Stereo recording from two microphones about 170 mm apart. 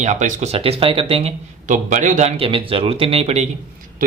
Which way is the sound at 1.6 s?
45° right (ahead or behind).